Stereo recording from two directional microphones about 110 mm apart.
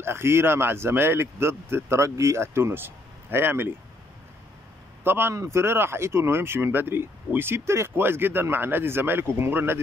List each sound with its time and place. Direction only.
0.0 s speech: 20° right (ahead or behind)
5.0 s speech: 20° right (ahead or behind)